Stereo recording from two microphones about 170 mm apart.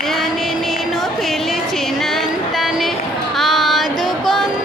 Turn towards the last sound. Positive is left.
turn(degrees=0)  # may be behind; listen again after turning